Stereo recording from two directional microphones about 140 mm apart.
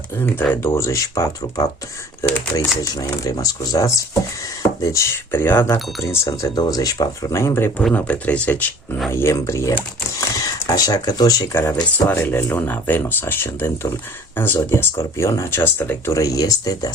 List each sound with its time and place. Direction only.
0.2 s speech: 15° left (ahead or behind)
2.9 s speech: 25° left (ahead or behind)
7.8 s speech: 5° left (ahead or behind); by 16.9 s 25° left (ahead or behind)